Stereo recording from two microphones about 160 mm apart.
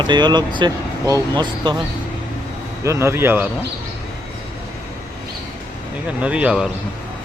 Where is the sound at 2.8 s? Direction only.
15° right (ahead or behind).